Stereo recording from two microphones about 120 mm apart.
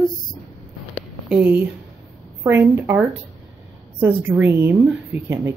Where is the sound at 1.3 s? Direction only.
10° right (ahead or behind).